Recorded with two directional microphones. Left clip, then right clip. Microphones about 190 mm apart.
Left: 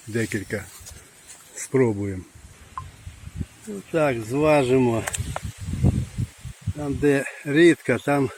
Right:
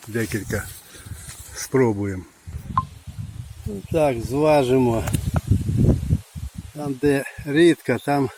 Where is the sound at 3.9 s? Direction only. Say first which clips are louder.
Right 2 dB; 5° right (ahead or behind).